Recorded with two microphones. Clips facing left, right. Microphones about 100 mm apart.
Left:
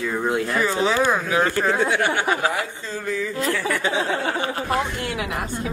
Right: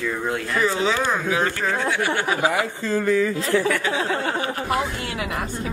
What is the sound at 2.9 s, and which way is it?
Speech, 65° right (ahead or behind).